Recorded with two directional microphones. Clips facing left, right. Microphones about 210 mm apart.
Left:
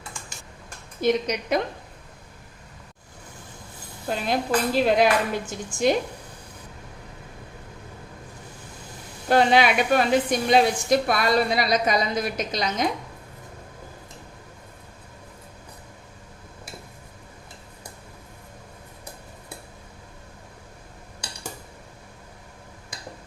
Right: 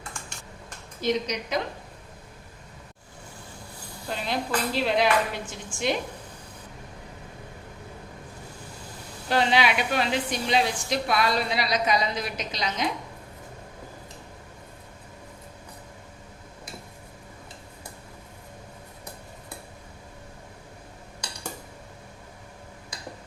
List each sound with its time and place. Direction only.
1.0 s a woman's voice: 55° left (ahead or behind)
4.1 s a woman's voice: 45° left (ahead or behind)
9.3 s a woman's voice: 50° left (ahead or behind)